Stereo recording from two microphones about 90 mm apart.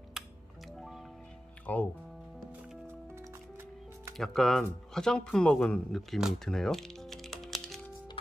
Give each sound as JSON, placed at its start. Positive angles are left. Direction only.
{"t": 0.2, "sound": "music", "side_deg": -5}
{"t": 1.7, "sound": "speech", "side_deg": 15}
{"t": 4.2, "sound": "speech", "side_deg": 0}